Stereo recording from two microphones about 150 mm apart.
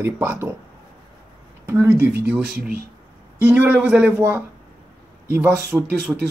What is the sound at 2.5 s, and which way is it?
Speech, 80° right.